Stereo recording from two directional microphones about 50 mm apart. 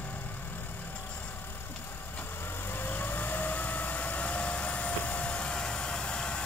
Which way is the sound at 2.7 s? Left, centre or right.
Left.